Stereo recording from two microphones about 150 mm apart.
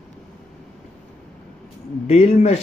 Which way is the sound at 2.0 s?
45° left (ahead or behind).